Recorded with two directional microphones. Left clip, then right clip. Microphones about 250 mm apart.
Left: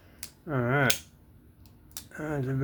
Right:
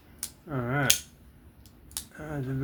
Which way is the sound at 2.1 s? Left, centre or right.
Left.